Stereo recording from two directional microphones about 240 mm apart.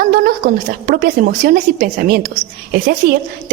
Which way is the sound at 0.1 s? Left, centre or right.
Right.